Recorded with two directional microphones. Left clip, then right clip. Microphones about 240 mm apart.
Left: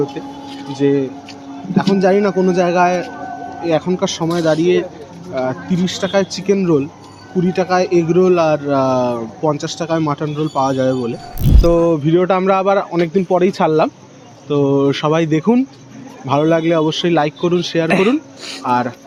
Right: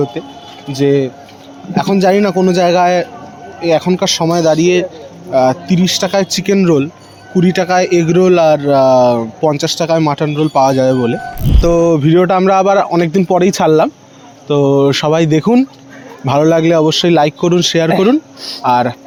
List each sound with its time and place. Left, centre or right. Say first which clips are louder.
0.7 s speech: right 4 dB; right